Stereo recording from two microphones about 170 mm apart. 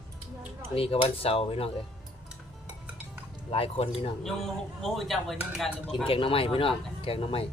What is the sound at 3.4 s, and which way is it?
Speech, 35° left (ahead or behind).